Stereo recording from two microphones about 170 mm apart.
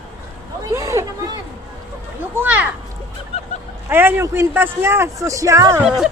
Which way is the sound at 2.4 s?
10° right (ahead or behind).